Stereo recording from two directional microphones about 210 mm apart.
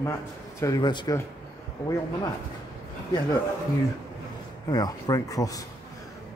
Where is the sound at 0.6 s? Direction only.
15° left (ahead or behind).